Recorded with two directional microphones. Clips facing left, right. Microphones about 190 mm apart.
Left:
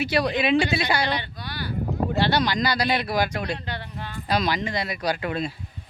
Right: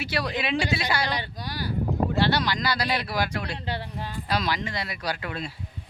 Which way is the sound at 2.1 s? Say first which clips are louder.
Left 4 dB; 20° left (ahead or behind).